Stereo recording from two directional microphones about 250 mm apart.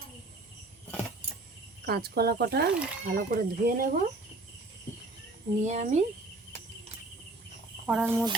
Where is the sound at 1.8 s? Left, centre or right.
Right.